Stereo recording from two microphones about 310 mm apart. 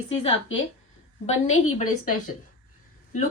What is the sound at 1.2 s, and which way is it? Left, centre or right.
Speech, left.